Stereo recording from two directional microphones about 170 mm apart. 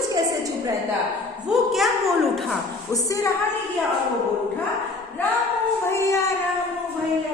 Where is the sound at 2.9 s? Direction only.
20° left (ahead or behind).